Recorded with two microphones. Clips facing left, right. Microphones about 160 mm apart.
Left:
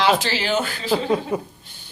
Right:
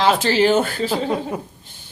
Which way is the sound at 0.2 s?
50° right (ahead or behind).